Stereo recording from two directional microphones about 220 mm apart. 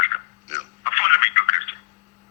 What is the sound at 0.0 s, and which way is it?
Telephone, 30° left (ahead or behind).